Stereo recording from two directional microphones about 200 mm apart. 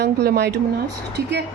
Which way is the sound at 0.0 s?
55° right (ahead or behind).